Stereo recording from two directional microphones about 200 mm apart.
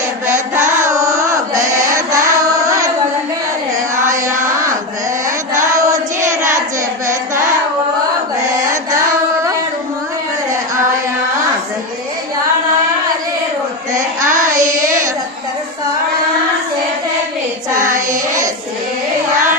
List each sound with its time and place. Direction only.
0.9 s carnatic music: 15° right (ahead or behind)
4.1 s a sound: 15° right (ahead or behind)
5.7 s child singing: 15° right (ahead or behind)
13.9 s child singing: 40° right (ahead or behind)
14.5 s child singing: 20° right (ahead or behind)
17.9 s child singing: 40° right (ahead or behind)